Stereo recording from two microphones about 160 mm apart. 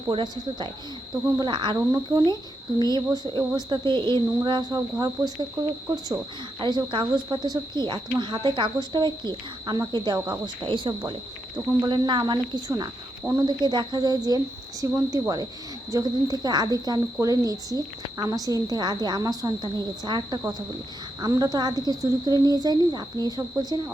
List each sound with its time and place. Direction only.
0.1 s speech: 30° right (ahead or behind)
6.6 s speech: 30° right (ahead or behind)